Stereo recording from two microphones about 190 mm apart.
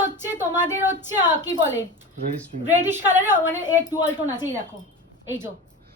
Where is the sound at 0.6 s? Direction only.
10° right (ahead or behind).